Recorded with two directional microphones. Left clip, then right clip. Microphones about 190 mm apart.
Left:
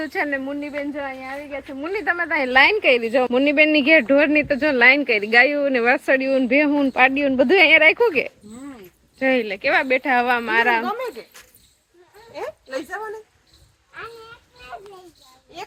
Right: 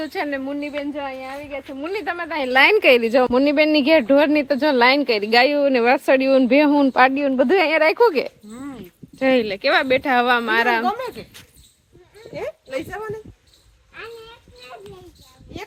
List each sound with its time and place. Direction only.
0.0 s a woman's voice: centre (ahead or behind)
2.8 s speech: 35° right (ahead or behind)
7.1 s a woman's voice: 5° right (ahead or behind); by 10.8 s 30° right (ahead or behind)
10.8 s speech: 65° right (ahead or behind)
12.3 s speech: 15° right (ahead or behind)